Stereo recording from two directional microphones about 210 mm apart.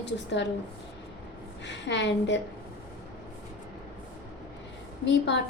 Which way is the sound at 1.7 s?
55° left (ahead or behind).